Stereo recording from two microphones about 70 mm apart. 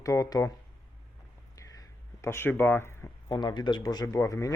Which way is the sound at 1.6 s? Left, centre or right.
Left.